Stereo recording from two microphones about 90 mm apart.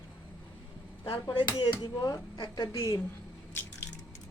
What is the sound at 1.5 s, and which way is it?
Speech, 55° left (ahead or behind).